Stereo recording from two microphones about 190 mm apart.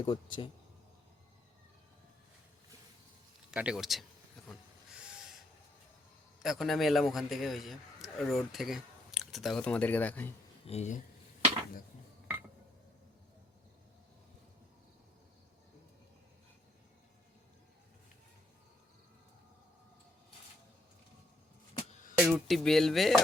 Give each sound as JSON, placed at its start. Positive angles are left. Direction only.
{"t": 0.0, "sound": "speech", "side_deg": 25}
{"t": 3.5, "sound": "music", "side_deg": -5}
{"t": 4.9, "sound": "owl", "side_deg": -5}
{"t": 6.4, "sound": "a man's voice", "side_deg": 0}
{"t": 10.7, "sound": "speech", "side_deg": 35}
{"t": 22.2, "sound": "music", "side_deg": 0}